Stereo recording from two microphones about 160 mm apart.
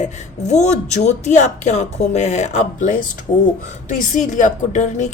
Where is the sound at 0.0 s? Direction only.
45° left (ahead or behind).